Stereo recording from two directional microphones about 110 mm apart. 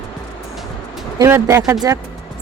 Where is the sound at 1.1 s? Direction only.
25° right (ahead or behind).